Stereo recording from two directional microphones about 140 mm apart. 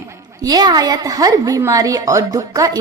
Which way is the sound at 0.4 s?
30° right (ahead or behind).